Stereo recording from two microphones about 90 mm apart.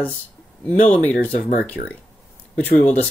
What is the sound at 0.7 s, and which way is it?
Speech, 20° left (ahead or behind).